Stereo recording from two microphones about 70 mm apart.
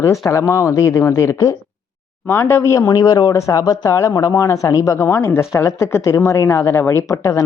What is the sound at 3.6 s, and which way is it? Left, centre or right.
Speech, left.